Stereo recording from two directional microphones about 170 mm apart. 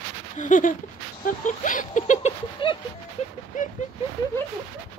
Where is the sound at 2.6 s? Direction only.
30° left (ahead or behind).